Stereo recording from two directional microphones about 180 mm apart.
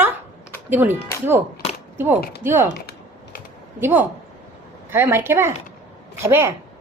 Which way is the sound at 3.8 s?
10° right (ahead or behind).